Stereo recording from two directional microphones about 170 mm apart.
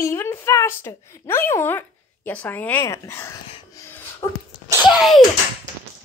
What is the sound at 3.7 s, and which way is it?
Music, 15° left (ahead or behind).